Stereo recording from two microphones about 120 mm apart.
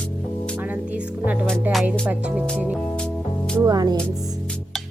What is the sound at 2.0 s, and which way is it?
Speech, 10° right (ahead or behind).